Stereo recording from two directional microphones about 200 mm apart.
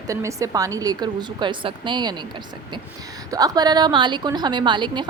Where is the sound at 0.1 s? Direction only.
15° right (ahead or behind).